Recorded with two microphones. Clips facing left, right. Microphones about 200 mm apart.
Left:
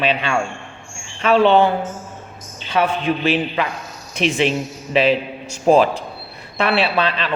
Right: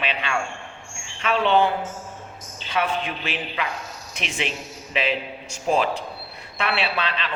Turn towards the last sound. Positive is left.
turn(degrees=40)  # may be behind; listen again after turning